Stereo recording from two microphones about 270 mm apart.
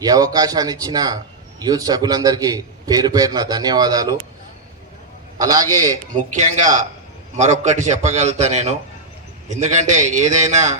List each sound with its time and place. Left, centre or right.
0.0 s a man's voice: centre
5.4 s a man's voice: centre
6.6 s a man's voice: right